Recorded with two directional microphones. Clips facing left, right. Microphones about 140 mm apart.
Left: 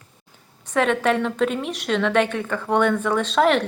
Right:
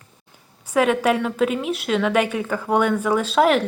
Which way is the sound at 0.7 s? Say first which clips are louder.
Right 2 dB; 10° right (ahead or behind).